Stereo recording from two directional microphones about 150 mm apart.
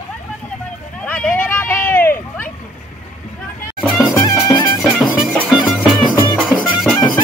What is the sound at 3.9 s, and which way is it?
Music, 15° left (ahead or behind).